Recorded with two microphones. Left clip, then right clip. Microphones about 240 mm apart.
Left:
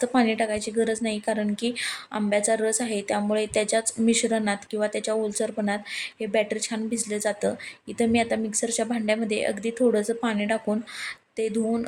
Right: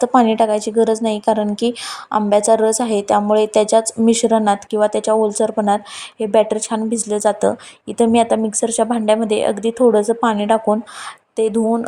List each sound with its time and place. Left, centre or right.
0.0 s a woman's voice: centre